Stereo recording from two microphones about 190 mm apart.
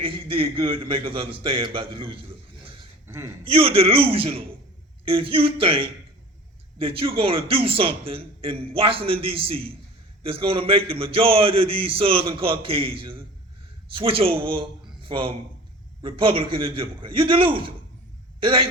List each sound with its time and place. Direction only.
0.0 s a man's voice: 30° right (ahead or behind)
3.4 s a man's voice: 30° right (ahead or behind)